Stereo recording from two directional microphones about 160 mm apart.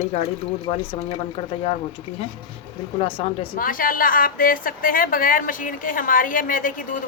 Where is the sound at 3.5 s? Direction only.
60° left (ahead or behind).